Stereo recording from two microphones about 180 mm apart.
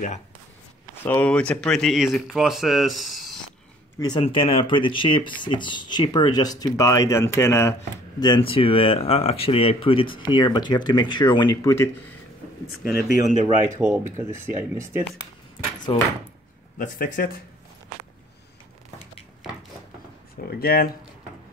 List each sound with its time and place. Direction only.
1.0 s speech: 10° left (ahead or behind)
4.0 s speech: 25° left (ahead or behind)
8.2 s speech: 25° left (ahead or behind)
12.8 s speech: 50° left (ahead or behind)
13.7 s speech: 10° right (ahead or behind)
15.9 s speech: 30° left (ahead or behind)
16.7 s speech: 50° left (ahead or behind)
20.3 s speech: 55° left (ahead or behind)